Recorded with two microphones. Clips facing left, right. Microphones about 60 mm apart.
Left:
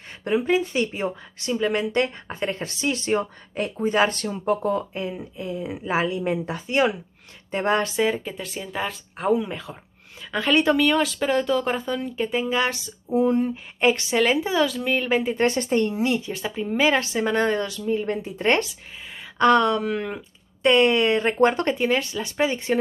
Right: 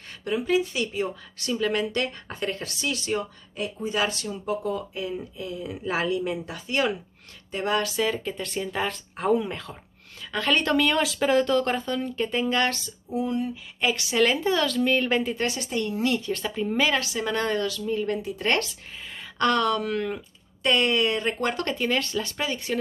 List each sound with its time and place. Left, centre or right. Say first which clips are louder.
0.2 s speech: left 3 dB; left
3.5 s speech: left 6 dB; left
5.4 s speech: left 3 dB; left
8.1 s speech: left 1 dB; centre
13.1 s speech: left 7 dB; left
14.1 s speech: left 2 dB; centre
15.3 s speech: left 7 dB; left
15.9 s speech: left 1 dB; left
16.8 s speech: left 6 dB; left